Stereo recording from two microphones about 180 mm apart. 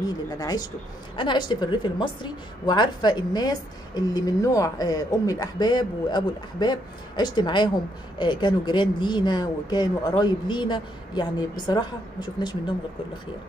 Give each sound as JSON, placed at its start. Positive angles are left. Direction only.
{"t": 0.0, "sound": "a woman's voice", "side_deg": 20}